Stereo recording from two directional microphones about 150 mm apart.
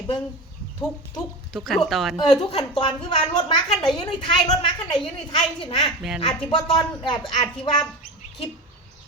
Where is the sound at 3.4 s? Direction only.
30° left (ahead or behind).